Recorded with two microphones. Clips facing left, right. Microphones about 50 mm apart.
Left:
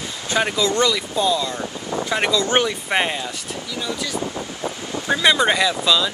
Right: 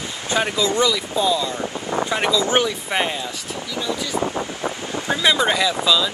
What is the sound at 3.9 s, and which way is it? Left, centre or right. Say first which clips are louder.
Wind noise: right 4 dB; right.